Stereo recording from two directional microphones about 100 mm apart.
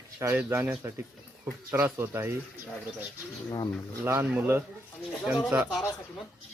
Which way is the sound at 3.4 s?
45° left (ahead or behind).